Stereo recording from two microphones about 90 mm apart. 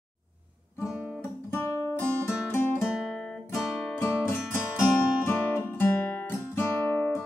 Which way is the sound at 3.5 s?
30° left (ahead or behind).